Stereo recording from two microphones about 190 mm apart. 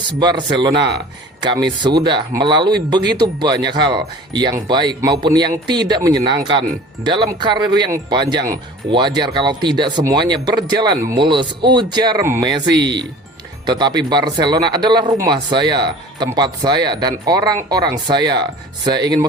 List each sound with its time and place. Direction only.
0.2 s speech: 25° right (ahead or behind)
12.7 s speech: 65° right (ahead or behind)
13.7 s speech: 20° right (ahead or behind)